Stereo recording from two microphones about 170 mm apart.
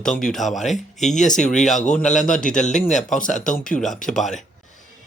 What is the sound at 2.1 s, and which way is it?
Speech, 5° left (ahead or behind).